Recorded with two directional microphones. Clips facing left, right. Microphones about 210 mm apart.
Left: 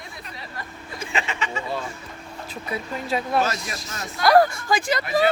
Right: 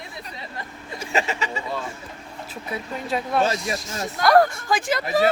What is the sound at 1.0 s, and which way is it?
Speech, 40° right (ahead or behind).